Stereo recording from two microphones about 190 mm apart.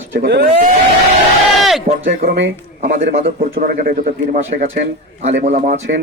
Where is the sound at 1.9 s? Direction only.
50° right (ahead or behind).